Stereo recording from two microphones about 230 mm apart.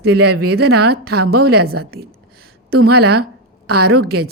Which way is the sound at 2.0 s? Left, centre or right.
Right.